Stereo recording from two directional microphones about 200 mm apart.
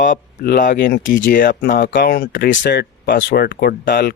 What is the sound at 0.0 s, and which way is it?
Speech, 45° left (ahead or behind).